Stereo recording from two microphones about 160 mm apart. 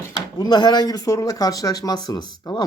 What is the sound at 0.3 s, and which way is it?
Speech, 30° left (ahead or behind).